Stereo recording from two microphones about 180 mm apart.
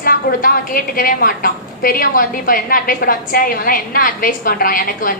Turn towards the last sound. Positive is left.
turn(degrees=50)  # may be behind; listen again after turning